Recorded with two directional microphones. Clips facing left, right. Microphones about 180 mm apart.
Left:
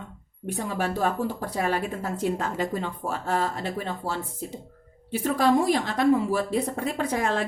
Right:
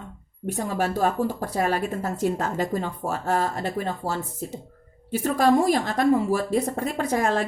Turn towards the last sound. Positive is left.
turn(degrees=-45)  # may be behind; listen again after turning